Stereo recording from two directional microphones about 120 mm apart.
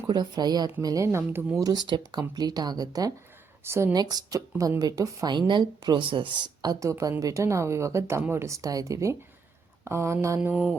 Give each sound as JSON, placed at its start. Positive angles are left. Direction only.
{"t": 0.1, "sound": "speech", "side_deg": -35}
{"t": 1.6, "sound": "speech", "side_deg": -35}
{"t": 3.6, "sound": "speech", "side_deg": -20}
{"t": 3.9, "sound": "speech", "side_deg": -30}
{"t": 10.5, "sound": "mantra", "side_deg": 0}